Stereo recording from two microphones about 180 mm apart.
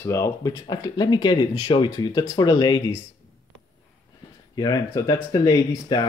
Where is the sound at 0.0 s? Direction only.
15° left (ahead or behind).